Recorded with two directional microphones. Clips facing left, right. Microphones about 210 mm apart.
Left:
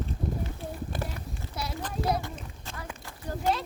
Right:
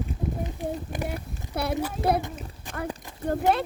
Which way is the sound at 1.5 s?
60° right (ahead or behind).